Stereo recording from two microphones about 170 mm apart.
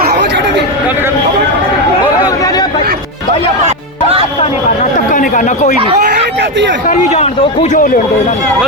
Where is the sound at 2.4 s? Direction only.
20° left (ahead or behind).